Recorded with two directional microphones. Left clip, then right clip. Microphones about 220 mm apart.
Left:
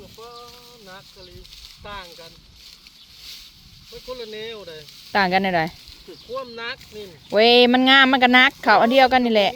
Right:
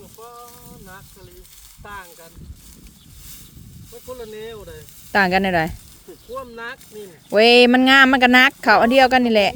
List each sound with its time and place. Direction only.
0.2 s a sound: 5° right (ahead or behind)
1.8 s speech: 10° right (ahead or behind)
4.0 s speech: 15° right (ahead or behind)